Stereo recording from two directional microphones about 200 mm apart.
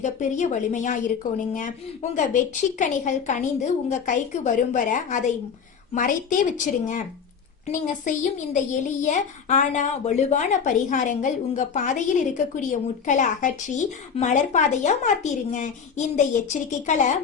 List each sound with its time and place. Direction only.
0.0 s a child's voice: 35° left (ahead or behind)